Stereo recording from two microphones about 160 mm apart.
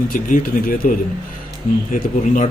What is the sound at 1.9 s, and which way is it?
Speech, 50° left (ahead or behind).